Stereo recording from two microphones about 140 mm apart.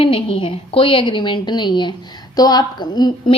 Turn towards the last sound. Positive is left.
turn(degrees=30)  # may be behind; listen again after turning